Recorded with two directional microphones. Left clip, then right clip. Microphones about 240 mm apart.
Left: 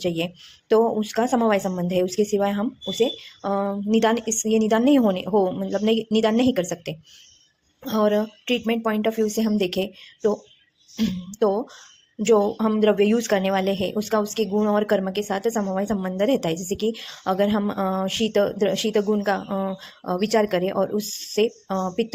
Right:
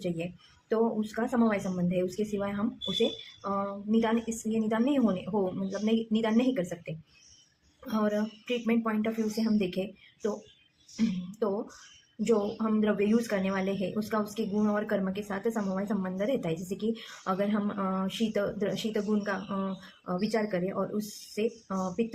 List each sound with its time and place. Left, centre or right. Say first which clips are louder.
0.7 s speech: left 10 dB; left
12.2 s speech: left 9 dB; left